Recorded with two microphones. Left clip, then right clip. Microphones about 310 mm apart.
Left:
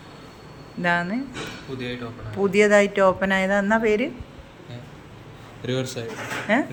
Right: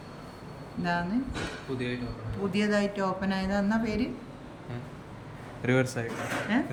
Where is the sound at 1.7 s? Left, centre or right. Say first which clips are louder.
Left 1 dB; centre.